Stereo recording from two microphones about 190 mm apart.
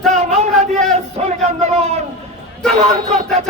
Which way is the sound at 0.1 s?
35° right (ahead or behind).